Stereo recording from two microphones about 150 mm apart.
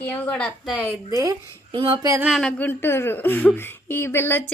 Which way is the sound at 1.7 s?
35° right (ahead or behind).